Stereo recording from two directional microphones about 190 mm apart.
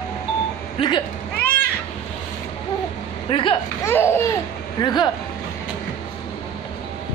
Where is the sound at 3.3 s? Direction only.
25° left (ahead or behind).